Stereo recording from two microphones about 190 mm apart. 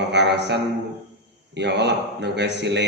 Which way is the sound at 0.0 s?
65° right (ahead or behind).